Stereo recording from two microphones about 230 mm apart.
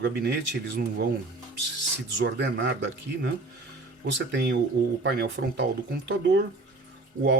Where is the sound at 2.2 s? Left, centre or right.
Right.